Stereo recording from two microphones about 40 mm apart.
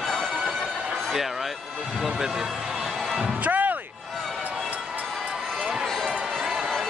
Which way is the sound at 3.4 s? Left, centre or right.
Right.